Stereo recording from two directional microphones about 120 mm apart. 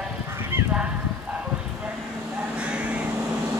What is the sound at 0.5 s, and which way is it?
Honk, 20° right (ahead or behind).